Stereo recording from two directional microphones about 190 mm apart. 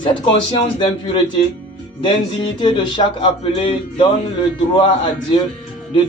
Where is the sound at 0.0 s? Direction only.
25° left (ahead or behind).